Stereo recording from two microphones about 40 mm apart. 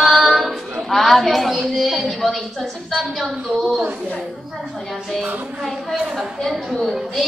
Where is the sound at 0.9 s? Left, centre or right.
Centre.